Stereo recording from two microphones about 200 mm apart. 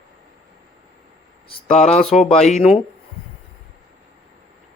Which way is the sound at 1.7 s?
35° left (ahead or behind).